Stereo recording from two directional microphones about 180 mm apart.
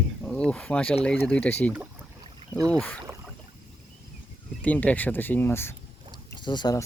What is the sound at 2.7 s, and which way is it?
Speech, 5° left (ahead or behind).